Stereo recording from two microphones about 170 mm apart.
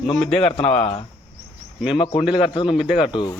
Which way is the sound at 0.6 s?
35° left (ahead or behind).